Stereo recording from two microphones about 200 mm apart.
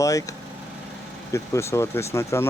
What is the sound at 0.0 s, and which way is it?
Speech, 15° left (ahead or behind).